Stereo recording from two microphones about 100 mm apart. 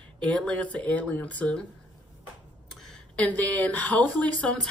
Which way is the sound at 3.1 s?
15° left (ahead or behind).